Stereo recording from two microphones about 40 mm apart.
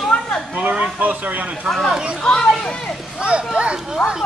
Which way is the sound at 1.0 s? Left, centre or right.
Right.